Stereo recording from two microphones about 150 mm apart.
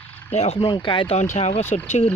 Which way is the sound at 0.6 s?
30° left (ahead or behind).